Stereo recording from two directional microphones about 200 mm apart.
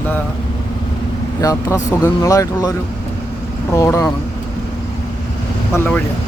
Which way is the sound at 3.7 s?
15° left (ahead or behind).